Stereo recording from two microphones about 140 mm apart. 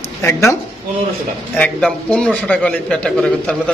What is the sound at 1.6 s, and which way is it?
A man's voice, 10° left (ahead or behind).